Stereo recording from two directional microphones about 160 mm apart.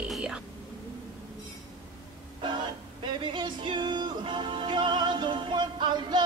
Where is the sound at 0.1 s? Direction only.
5° right (ahead or behind).